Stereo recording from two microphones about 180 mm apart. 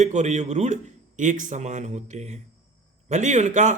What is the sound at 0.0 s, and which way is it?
A man's voice, 40° right (ahead or behind).